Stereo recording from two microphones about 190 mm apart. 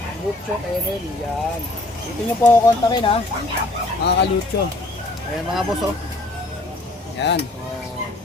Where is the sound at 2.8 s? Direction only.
20° left (ahead or behind).